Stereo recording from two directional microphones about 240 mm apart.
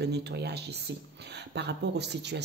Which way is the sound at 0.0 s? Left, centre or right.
Right.